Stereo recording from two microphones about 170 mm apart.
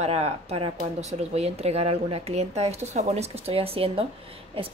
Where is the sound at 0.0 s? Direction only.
40° right (ahead or behind).